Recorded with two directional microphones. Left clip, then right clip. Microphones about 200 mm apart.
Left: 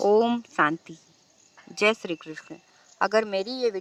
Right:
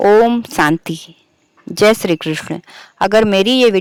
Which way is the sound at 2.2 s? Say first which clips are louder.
Right 19 dB; 40° right (ahead or behind).